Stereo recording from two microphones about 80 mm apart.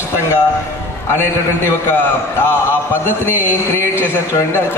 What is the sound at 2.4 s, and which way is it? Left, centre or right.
Speech, left.